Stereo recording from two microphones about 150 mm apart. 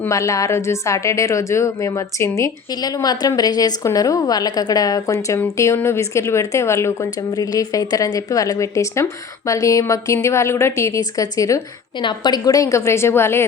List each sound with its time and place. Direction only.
0.0 s a woman's voice: 20° left (ahead or behind)